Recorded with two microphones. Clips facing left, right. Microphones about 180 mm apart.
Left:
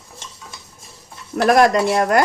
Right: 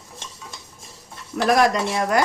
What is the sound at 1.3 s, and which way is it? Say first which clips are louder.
Speech: left 4 dB; 55° left (ahead or behind).